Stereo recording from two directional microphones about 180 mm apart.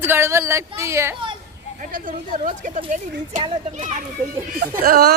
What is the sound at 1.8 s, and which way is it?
Speech, 50° right (ahead or behind).